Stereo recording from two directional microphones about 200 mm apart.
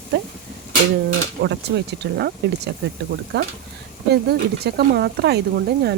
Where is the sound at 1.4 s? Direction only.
55° right (ahead or behind).